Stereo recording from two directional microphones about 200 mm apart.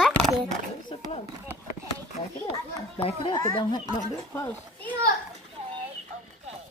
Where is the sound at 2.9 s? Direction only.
25° left (ahead or behind).